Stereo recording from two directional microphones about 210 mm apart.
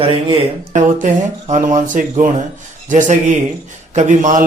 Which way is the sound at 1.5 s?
35° right (ahead or behind).